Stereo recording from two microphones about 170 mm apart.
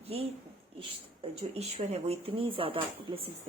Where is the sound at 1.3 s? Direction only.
40° right (ahead or behind).